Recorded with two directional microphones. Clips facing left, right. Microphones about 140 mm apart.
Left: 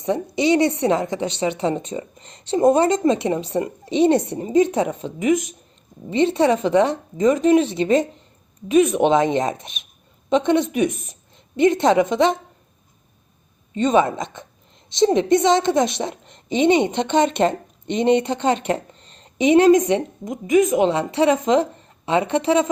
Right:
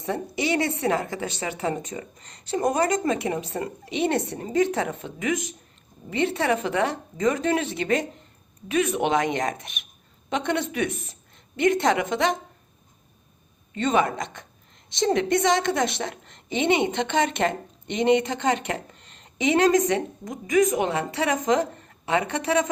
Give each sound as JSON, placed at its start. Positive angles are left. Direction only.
{"t": 0.0, "sound": "a woman's voice", "side_deg": 20}
{"t": 13.7, "sound": "a woman's voice", "side_deg": 20}